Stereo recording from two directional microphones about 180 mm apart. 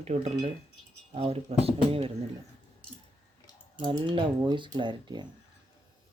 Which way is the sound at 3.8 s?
25° right (ahead or behind).